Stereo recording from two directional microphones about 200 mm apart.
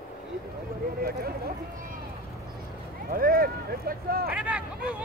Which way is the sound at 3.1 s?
45° right (ahead or behind).